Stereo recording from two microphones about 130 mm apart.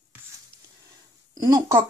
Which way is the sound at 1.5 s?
25° right (ahead or behind).